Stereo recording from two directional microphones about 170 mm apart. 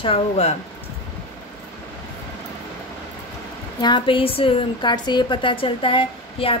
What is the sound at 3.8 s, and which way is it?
A woman's voice, 30° left (ahead or behind).